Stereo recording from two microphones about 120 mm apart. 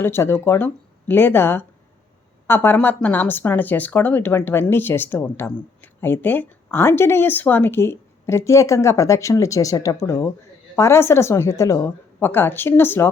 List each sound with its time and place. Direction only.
0.0 s speech: 20° left (ahead or behind)